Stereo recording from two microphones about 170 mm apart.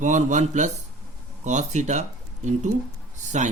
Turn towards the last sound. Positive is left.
turn(degrees=-45)  # may be behind; listen again after turning